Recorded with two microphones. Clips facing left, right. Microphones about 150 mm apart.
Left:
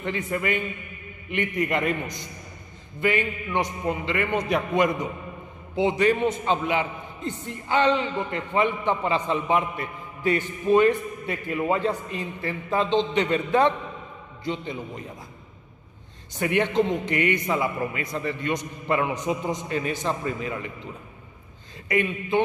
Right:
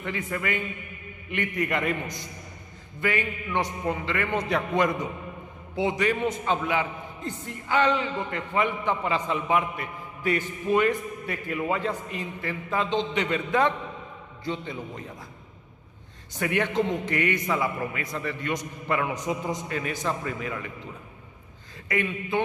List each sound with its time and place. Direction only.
0.0 s a man's voice: 25° left (ahead or behind)
5.8 s a man's voice: 30° left (ahead or behind)
14.4 s a man's voice: 20° left (ahead or behind)
16.3 s a man's voice: 25° left (ahead or behind)